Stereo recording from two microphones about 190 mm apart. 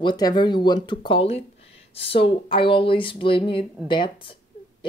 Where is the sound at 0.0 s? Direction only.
20° left (ahead or behind).